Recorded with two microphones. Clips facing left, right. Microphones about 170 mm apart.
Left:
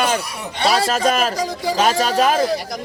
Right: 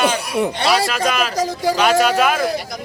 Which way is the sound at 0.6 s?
45° left (ahead or behind).